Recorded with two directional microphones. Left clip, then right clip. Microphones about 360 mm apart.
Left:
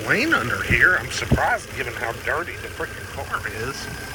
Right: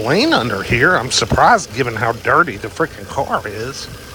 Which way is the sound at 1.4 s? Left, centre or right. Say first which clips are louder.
Right 10 dB; right.